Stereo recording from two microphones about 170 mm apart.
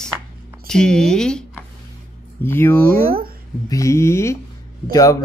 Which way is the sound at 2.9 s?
60° right (ahead or behind).